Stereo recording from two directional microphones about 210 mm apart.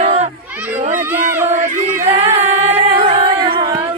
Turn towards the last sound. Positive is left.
turn(degrees=-25)  # may be behind; listen again after turning